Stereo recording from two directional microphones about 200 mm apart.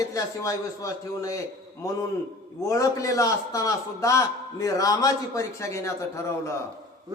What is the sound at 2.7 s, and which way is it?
A man's voice, 15° left (ahead or behind).